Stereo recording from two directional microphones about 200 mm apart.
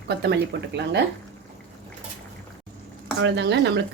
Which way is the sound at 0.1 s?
55° right (ahead or behind).